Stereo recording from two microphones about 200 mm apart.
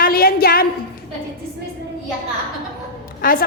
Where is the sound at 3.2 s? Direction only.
45° left (ahead or behind).